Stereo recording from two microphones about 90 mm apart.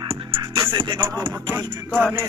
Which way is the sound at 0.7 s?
65° right (ahead or behind).